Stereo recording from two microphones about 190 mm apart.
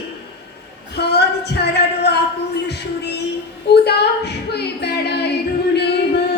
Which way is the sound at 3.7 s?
60° left (ahead or behind).